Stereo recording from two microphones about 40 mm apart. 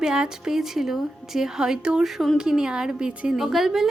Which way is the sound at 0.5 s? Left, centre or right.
Centre.